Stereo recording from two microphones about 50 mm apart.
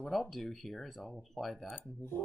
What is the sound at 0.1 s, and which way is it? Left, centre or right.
Speech, centre.